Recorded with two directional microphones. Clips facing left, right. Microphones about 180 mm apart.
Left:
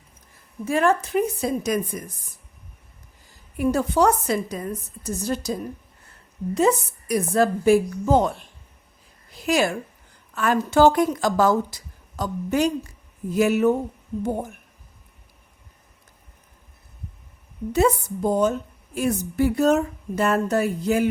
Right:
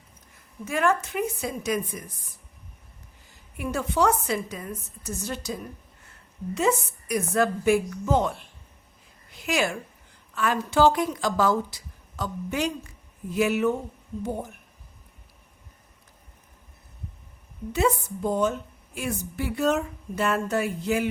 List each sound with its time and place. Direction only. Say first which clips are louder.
0.6 s a woman's voice: left 4 dB; 35° left (ahead or behind)
3.6 s a woman's voice: left 5 dB; 40° left (ahead or behind)
9.3 s a woman's voice: left 5 dB; 35° left (ahead or behind)
17.7 s a woman's voice: left 4 dB; 40° left (ahead or behind)